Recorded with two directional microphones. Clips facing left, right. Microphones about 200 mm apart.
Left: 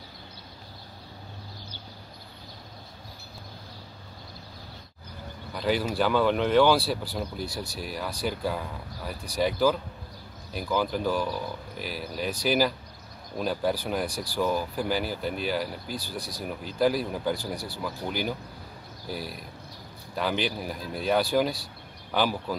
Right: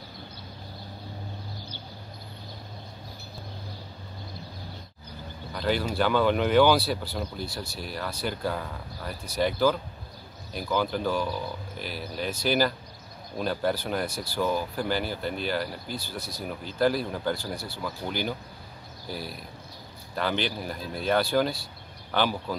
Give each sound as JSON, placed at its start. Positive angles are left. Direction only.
{"t": 5.5, "sound": "speech", "side_deg": 5}
{"t": 7.4, "sound": "speech", "side_deg": 15}
{"t": 15.9, "sound": "speech", "side_deg": 35}
{"t": 16.4, "sound": "speech", "side_deg": 5}